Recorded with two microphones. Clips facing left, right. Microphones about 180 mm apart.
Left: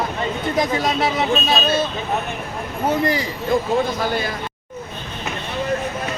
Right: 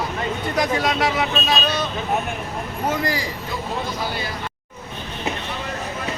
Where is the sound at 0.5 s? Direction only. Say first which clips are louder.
Even; 25° left (ahead or behind).